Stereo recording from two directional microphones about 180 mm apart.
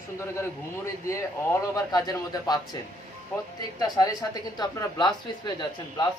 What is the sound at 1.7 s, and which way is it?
Speech, 20° left (ahead or behind).